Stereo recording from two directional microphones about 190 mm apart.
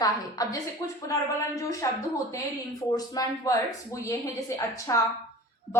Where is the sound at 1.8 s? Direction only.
15° left (ahead or behind).